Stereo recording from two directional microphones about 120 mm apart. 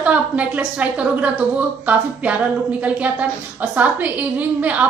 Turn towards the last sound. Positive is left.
turn(degrees=-10)  # may be behind; listen again after turning